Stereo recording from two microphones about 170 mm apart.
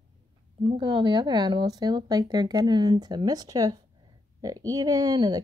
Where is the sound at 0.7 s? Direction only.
30° right (ahead or behind).